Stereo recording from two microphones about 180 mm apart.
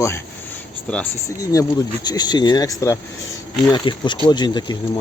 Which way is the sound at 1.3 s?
20° left (ahead or behind).